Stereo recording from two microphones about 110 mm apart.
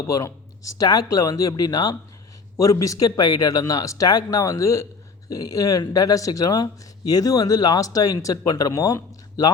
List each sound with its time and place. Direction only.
0.1 s speech: 30° left (ahead or behind)